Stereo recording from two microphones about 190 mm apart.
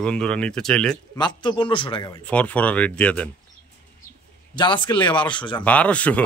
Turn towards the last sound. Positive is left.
turn(degrees=5)  # may be behind; listen again after turning